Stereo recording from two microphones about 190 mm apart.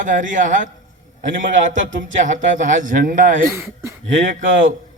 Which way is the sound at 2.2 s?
40° right (ahead or behind).